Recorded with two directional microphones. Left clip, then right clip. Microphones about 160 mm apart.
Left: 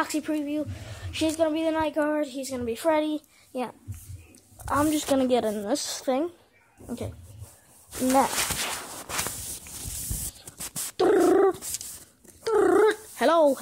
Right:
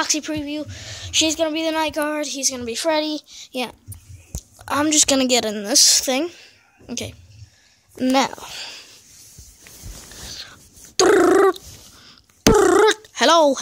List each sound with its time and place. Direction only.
0.0 s a woman's voice: 10° right (ahead or behind)
4.9 s a woman's voice: 10° right (ahead or behind)
11.0 s dog: 15° right (ahead or behind)
12.4 s purr: 15° right (ahead or behind)